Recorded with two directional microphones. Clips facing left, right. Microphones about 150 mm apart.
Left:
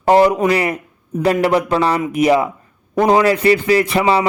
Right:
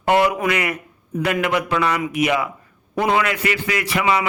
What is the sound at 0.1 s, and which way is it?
A man's voice, 35° left (ahead or behind).